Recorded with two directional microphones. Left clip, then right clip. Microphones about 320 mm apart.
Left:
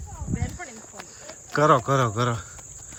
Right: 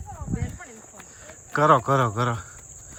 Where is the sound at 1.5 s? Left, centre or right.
Centre.